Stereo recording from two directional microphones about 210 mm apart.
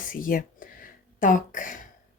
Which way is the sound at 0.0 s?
40° left (ahead or behind).